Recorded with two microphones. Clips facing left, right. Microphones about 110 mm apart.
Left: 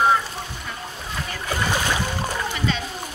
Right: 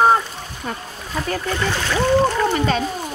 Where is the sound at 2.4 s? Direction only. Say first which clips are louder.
Right 7 dB; 45° right (ahead or behind).